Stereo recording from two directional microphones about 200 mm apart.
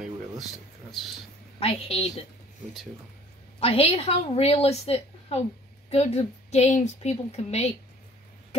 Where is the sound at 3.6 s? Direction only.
30° left (ahead or behind).